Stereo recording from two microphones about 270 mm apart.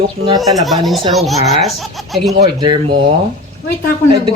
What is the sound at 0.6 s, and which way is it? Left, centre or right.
Speech, centre.